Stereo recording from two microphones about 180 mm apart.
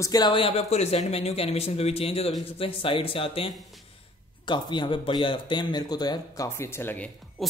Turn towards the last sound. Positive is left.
turn(degrees=5)  # may be behind; listen again after turning